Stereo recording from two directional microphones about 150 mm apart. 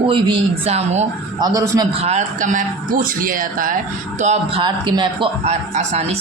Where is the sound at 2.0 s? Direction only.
50° right (ahead or behind).